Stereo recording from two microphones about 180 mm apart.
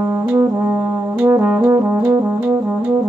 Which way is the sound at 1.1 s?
10° right (ahead or behind).